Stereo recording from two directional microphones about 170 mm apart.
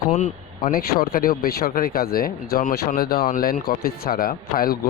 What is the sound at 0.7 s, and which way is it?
Speech, 60° left (ahead or behind).